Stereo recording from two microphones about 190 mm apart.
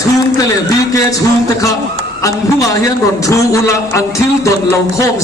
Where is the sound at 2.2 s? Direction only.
15° left (ahead or behind).